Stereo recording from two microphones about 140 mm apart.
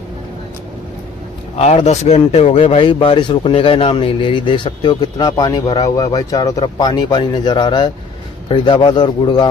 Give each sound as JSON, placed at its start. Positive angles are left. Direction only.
{"t": 1.6, "sound": "speech", "side_deg": 50}